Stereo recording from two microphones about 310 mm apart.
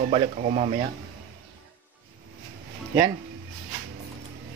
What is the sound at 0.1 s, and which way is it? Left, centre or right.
Speech, right.